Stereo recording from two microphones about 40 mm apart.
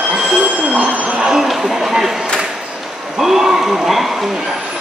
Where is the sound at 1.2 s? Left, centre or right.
Centre.